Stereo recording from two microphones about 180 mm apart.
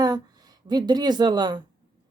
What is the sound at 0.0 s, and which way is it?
Speech, 20° right (ahead or behind).